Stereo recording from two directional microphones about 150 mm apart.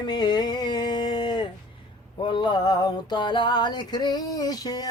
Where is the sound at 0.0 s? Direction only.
30° left (ahead or behind).